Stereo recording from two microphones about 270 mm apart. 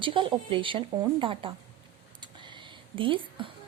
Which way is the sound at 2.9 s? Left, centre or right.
Centre.